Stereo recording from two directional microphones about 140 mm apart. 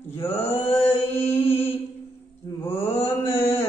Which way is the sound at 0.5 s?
15° left (ahead or behind).